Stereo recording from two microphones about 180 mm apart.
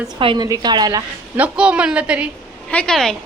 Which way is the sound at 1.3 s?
5° right (ahead or behind).